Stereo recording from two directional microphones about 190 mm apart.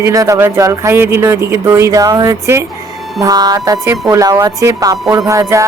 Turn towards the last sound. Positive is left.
turn(degrees=-15)  # may be behind; listen again after turning